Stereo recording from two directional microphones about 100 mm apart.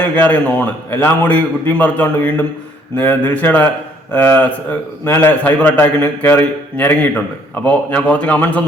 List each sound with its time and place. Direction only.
0.0 s a man's voice: 15° left (ahead or behind)